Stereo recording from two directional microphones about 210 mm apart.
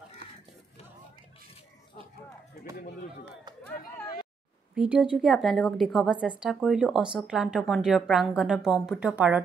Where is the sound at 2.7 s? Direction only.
40° left (ahead or behind).